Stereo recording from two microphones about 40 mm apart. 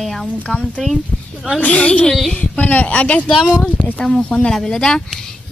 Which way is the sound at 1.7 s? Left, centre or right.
Left.